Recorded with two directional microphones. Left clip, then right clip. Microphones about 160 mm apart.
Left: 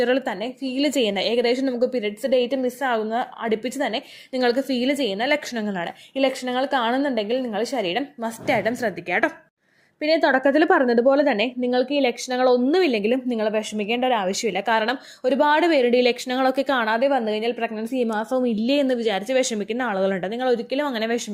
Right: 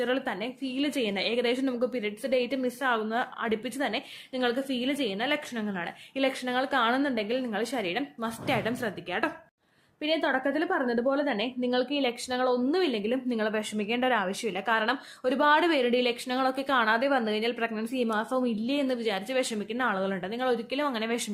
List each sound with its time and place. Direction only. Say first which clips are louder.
0.0 s a woman's voice: left 7 dB; 30° left (ahead or behind)
7.8 s a woman's voice: left 6 dB; 30° left (ahead or behind)